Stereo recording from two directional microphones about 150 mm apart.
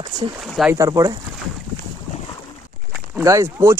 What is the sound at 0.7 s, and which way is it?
Speech, 25° right (ahead or behind).